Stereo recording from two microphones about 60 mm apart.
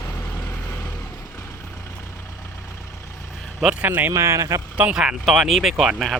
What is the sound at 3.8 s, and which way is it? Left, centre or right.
Speech, right.